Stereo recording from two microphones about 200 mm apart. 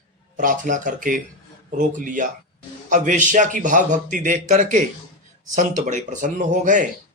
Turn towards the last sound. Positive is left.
turn(degrees=-40)  # may be behind; listen again after turning